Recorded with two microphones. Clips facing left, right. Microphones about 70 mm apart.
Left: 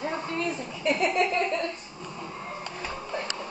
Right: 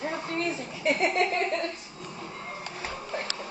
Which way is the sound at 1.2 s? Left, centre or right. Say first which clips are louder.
Left 1 dB; right.